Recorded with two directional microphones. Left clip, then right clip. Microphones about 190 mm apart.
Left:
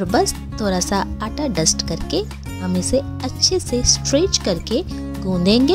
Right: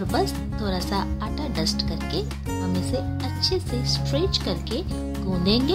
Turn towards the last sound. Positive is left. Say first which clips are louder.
# left 7 dB
turn(degrees=35)  # may be behind; listen again after turning